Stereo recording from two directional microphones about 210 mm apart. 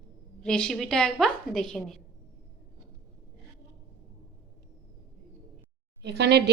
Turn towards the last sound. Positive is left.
turn(degrees=-50)  # may be behind; listen again after turning